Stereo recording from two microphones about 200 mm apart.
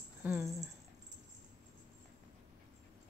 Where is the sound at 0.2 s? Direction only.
10° right (ahead or behind).